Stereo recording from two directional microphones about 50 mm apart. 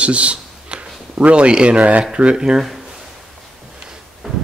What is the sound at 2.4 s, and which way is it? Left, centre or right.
Speech, centre.